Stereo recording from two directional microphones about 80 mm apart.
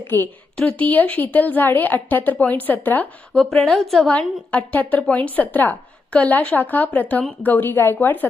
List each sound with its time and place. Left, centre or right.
0.1 s a woman's voice: left
3.3 s a woman's voice: centre
4.7 s a woman's voice: left